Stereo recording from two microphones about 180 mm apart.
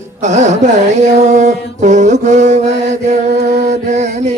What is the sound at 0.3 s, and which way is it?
Mantra, 40° right (ahead or behind).